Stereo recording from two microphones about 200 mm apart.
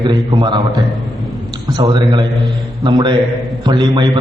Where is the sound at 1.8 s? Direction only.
20° right (ahead or behind).